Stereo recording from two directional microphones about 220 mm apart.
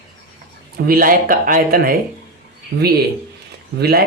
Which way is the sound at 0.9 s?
40° right (ahead or behind).